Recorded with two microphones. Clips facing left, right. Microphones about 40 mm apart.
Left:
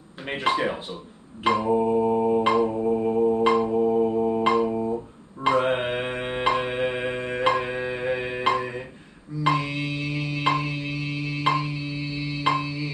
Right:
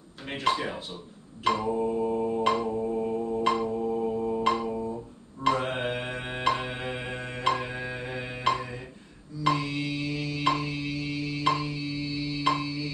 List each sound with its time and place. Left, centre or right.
0.3 s mantra: left
2.4 s music: centre
2.7 s mantra: left
3.4 s mantra: centre
3.7 s mantra: left
4.5 s a sound: centre
5.4 s mantra: left
9.4 s a sound: left
9.8 s music: left